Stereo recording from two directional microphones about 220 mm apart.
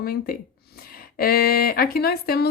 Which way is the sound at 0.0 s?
40° left (ahead or behind).